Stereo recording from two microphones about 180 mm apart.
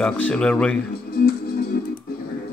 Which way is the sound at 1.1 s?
55° left (ahead or behind).